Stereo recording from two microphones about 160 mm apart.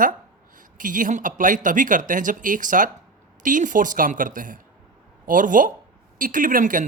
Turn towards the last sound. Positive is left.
turn(degrees=-55)  # may be behind; listen again after turning